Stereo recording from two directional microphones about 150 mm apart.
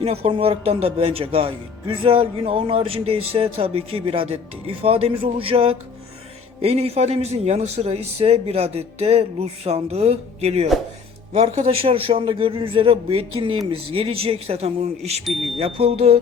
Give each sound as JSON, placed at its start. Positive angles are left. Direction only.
{"t": 0.0, "sound": "a man's voice", "side_deg": -40}